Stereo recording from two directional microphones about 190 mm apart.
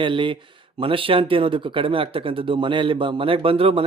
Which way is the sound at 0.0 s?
25° right (ahead or behind).